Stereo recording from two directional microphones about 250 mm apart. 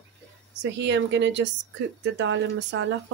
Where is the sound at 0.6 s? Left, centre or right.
Right.